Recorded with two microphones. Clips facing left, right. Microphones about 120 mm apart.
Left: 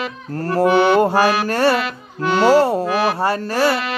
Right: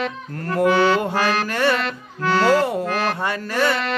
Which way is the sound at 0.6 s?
15° left (ahead or behind).